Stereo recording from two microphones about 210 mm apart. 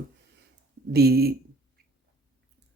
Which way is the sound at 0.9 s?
50° right (ahead or behind).